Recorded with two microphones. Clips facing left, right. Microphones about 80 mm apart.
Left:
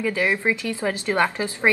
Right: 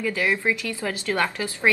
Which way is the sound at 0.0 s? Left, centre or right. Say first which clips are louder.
Left 1 dB; centre.